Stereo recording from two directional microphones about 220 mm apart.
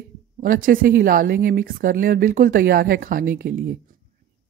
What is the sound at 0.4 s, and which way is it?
Speech, 40° right (ahead or behind).